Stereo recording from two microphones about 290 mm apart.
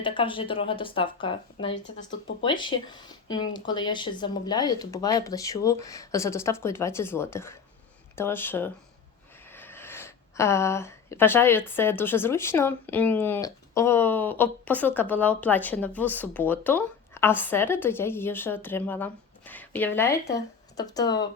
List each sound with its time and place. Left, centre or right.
0.0 s a woman's voice: centre
1.7 s speech: left
2.4 s a woman's voice: centre